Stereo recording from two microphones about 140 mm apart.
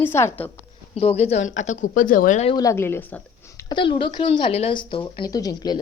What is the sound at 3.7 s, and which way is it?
Speech, 35° left (ahead or behind).